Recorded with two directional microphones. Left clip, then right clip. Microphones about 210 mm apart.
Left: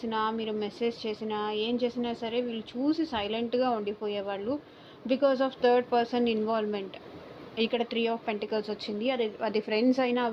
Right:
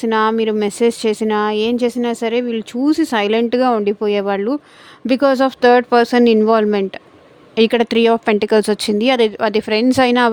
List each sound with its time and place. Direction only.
0.0 s speech: 70° right (ahead or behind)